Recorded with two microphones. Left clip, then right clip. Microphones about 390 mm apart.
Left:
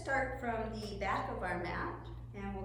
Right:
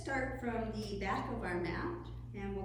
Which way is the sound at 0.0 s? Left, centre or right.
Centre.